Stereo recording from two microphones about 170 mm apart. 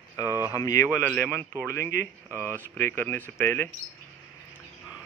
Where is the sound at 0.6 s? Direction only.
20° left (ahead or behind).